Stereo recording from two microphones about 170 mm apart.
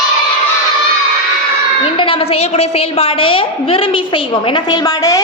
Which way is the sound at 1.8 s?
30° left (ahead or behind).